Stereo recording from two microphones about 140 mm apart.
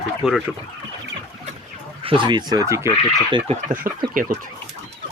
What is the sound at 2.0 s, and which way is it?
Speech, 35° right (ahead or behind).